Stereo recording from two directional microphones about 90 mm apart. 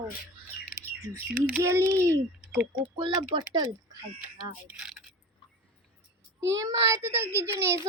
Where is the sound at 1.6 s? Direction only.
35° right (ahead or behind).